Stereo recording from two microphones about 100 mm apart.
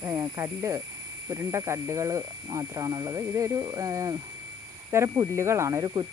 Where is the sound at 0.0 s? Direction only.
30° right (ahead or behind).